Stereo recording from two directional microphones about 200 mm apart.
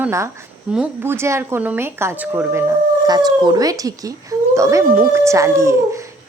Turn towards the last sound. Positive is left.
turn(degrees=-15)  # may be behind; listen again after turning